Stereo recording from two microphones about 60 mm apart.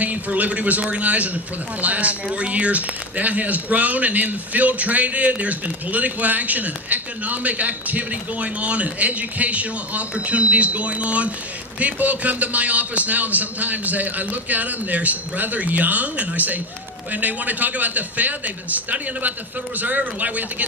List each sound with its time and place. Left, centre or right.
0.0 s a man's voice: right